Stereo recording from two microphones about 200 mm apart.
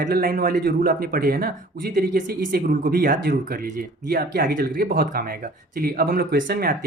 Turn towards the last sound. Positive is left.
turn(degrees=-45)  # may be behind; listen again after turning